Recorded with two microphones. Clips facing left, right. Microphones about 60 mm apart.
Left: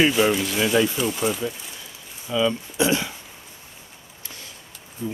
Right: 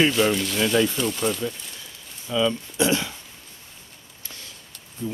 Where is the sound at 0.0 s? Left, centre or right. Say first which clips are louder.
Left 1 dB; centre.